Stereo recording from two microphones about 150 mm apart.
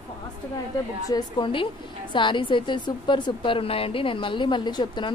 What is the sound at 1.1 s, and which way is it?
A woman's voice, 35° left (ahead or behind).